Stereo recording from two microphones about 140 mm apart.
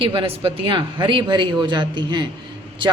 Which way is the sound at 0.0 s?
40° right (ahead or behind).